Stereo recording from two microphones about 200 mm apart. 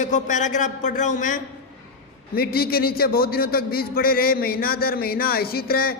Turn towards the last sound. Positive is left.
turn(degrees=50)  # may be behind; listen again after turning